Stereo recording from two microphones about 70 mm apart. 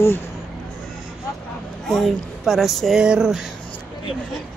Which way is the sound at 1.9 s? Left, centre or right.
Centre.